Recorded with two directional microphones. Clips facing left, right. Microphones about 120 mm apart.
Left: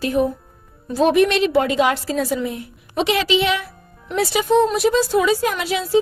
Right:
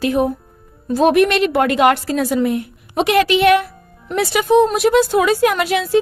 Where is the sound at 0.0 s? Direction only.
85° right.